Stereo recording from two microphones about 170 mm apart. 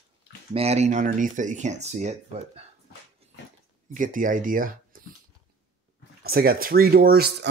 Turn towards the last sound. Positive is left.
turn(degrees=-65)  # may be behind; listen again after turning